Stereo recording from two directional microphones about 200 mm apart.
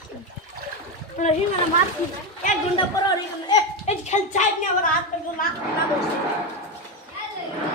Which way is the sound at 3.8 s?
35° left (ahead or behind).